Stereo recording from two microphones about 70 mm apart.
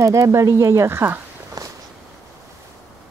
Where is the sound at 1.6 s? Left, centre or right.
Right.